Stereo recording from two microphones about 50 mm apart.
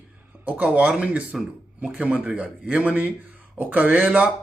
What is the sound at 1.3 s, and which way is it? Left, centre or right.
Speech, centre.